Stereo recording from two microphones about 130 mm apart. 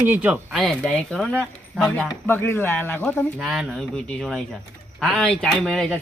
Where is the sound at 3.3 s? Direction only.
5° right (ahead or behind).